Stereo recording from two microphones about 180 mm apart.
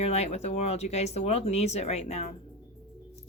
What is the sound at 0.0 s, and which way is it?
Speech, 35° left (ahead or behind).